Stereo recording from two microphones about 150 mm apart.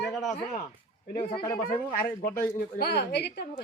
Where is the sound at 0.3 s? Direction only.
65° left (ahead or behind).